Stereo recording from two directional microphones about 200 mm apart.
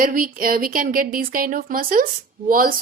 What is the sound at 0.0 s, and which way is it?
Speech, 45° right (ahead or behind).